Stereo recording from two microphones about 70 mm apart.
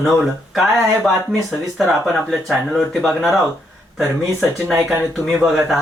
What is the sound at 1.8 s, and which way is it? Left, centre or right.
Speech, centre.